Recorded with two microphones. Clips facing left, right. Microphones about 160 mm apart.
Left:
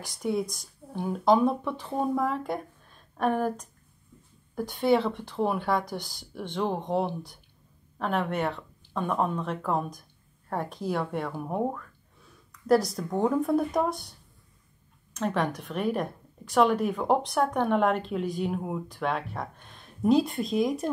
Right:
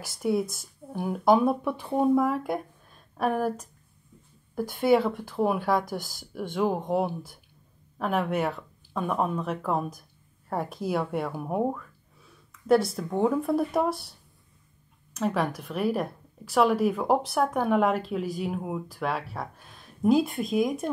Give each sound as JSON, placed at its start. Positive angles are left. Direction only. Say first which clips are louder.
{"t": 0.0, "sound": "speech", "louder": "right 2 dB", "side_deg": -5}
{"t": 15.1, "sound": "speech", "louder": "right 1 dB", "side_deg": -5}